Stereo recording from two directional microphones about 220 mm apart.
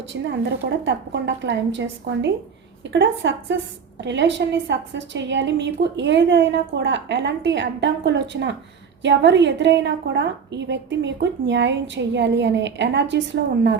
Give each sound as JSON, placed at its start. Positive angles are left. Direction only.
{"t": 0.1, "sound": "a woman's voice", "side_deg": -55}